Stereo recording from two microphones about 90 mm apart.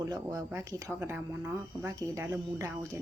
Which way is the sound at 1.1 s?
25° right (ahead or behind).